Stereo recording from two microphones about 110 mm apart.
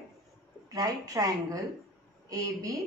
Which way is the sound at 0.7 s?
35° right (ahead or behind).